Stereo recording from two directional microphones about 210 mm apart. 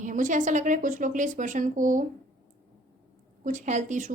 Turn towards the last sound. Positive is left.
turn(degrees=-35)  # may be behind; listen again after turning